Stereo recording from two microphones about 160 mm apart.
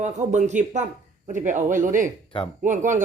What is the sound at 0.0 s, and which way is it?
Speech, 50° right (ahead or behind).